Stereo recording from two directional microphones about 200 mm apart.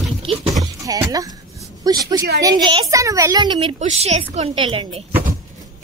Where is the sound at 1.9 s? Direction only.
20° right (ahead or behind).